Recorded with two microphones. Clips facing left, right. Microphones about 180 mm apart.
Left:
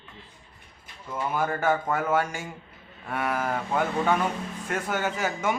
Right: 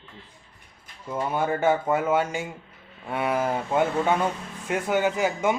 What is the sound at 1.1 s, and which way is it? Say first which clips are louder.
Speech: right 2 dB; 25° right (ahead or behind).